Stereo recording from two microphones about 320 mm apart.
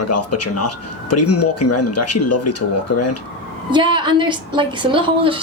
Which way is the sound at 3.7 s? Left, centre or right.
Centre.